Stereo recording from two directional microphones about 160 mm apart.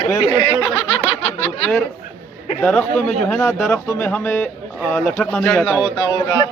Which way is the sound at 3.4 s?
15° left (ahead or behind).